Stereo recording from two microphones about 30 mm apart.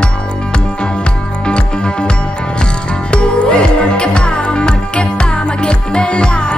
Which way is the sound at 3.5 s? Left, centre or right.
Left.